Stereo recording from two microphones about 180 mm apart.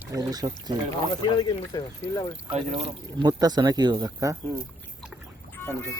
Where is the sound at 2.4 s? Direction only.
30° right (ahead or behind).